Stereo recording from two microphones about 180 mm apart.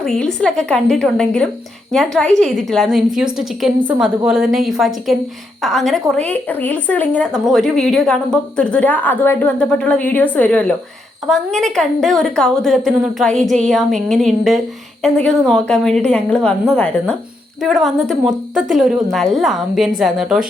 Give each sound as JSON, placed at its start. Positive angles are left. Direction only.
{"t": 0.0, "sound": "a woman's voice", "side_deg": 5}